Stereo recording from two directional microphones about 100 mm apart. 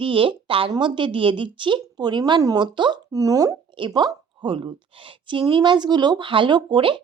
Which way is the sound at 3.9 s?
45° right (ahead or behind).